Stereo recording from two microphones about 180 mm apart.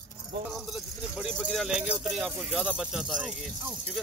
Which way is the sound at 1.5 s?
Centre (ahead or behind).